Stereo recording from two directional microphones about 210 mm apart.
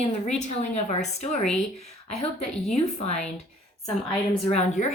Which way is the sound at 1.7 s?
30° left (ahead or behind).